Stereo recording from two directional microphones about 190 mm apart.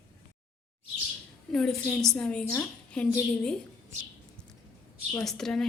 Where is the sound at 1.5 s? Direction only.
5° left (ahead or behind).